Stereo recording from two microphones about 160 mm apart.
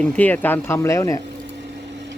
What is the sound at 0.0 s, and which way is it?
Speech, 10° left (ahead or behind).